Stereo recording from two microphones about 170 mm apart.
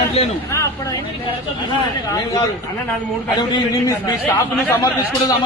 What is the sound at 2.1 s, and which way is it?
Speech, 20° left (ahead or behind).